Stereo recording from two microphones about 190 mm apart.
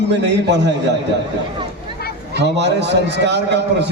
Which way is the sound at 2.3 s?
65° right (ahead or behind).